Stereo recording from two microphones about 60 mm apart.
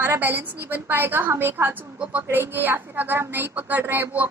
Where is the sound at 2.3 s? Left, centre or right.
Right.